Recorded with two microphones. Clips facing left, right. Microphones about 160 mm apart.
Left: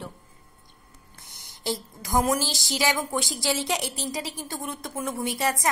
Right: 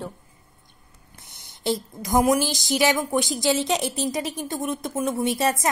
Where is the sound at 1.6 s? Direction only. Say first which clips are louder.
Right 5 dB; 20° right (ahead or behind).